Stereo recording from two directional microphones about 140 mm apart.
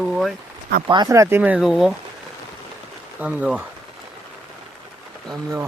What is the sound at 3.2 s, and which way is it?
Speech, 10° right (ahead or behind).